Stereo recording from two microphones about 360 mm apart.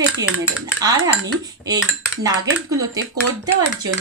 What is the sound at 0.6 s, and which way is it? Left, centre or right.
Dishes, centre.